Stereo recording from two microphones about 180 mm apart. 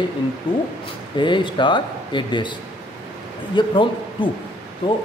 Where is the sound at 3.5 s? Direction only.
25° left (ahead or behind).